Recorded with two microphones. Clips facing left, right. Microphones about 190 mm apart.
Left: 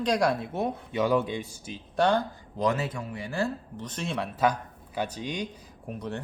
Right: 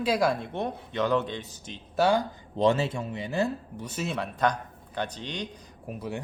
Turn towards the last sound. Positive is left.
turn(degrees=-10)  # may be behind; listen again after turning